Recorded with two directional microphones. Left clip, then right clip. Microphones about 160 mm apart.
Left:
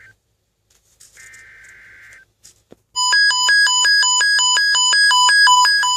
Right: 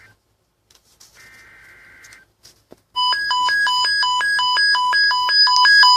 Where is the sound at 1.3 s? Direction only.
30° left (ahead or behind).